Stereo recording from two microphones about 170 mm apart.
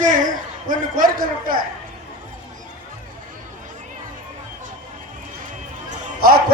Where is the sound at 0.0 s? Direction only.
50° right (ahead or behind).